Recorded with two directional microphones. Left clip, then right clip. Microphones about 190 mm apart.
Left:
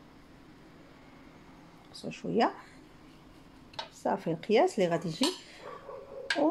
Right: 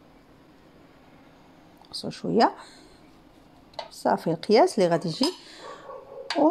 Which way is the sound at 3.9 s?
30° right (ahead or behind).